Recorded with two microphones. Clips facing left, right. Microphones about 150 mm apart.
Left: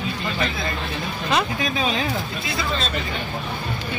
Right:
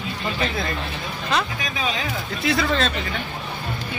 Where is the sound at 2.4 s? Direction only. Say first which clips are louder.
Right 5 dB; 75° right (ahead or behind).